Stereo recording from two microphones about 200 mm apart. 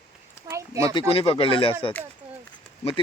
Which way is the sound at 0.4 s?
15° right (ahead or behind).